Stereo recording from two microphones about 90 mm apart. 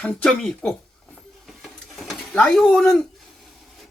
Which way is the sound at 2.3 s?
10° left (ahead or behind).